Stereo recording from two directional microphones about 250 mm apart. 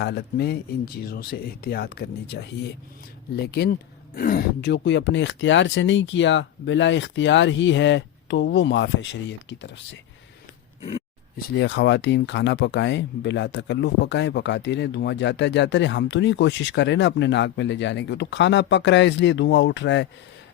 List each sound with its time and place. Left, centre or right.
0.0 s speech: left
11.5 s speech: left